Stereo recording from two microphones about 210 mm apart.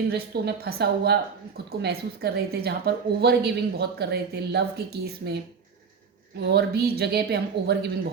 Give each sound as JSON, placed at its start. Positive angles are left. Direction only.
{"t": 0.1, "sound": "a woman's voice", "side_deg": -50}
{"t": 6.5, "sound": "a woman's voice", "side_deg": -50}